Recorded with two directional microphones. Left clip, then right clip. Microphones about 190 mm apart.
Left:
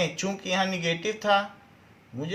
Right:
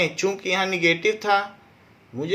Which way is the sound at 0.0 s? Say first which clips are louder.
Right 6 dB; 40° right (ahead or behind).